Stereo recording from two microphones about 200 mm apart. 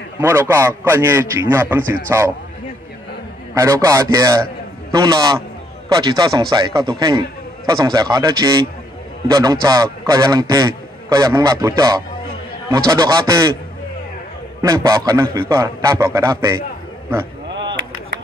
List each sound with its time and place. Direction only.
0.2 s a man's voice: 10° right (ahead or behind)
3.5 s a man's voice: 15° right (ahead or behind)
14.6 s a man's voice: 15° right (ahead or behind)
17.5 s chop: 65° right (ahead or behind)